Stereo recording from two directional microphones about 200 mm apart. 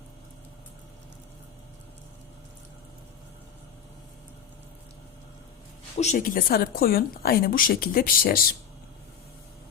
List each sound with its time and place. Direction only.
6.0 s a woman's voice: 40° left (ahead or behind)